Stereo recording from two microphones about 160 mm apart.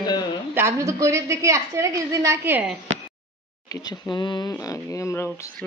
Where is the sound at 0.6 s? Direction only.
15° right (ahead or behind).